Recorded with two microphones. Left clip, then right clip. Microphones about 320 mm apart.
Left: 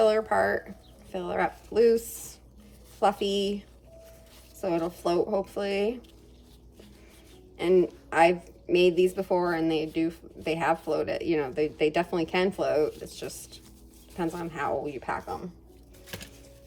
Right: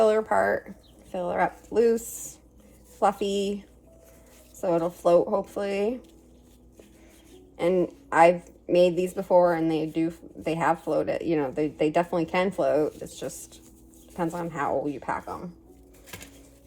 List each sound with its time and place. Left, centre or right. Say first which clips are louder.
0.0 s a woman's voice: right 1 dB; centre
4.6 s a woman's voice: right 4 dB; centre
7.5 s a woman's voice: left 1 dB; centre